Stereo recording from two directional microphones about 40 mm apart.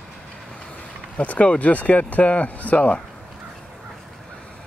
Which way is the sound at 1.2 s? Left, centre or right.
Left.